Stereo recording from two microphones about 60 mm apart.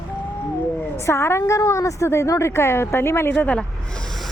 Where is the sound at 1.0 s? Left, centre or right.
Left.